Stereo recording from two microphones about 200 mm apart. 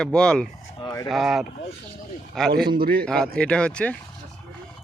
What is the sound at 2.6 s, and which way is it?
Speech, 50° right (ahead or behind).